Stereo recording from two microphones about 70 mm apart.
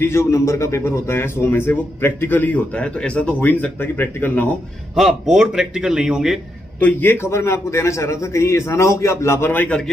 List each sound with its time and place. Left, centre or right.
0.0 s a man's voice: left; by 3.5 s centre
3.5 s a man's voice: left
4.9 s a man's voice: centre
6.8 s a man's voice: left
7.2 s a man's voice: left